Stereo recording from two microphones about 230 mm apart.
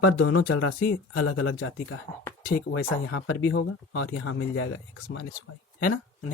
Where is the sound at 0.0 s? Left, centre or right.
Left.